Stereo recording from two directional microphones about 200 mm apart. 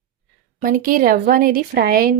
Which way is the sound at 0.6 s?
40° right (ahead or behind).